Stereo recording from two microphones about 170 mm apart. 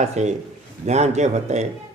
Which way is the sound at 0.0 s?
40° right (ahead or behind).